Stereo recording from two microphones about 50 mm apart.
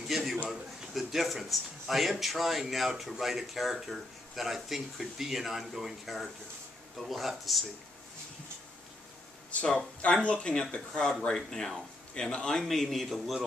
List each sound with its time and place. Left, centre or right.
0.1 s a sound: centre
0.5 s speech: centre
9.7 s speech: centre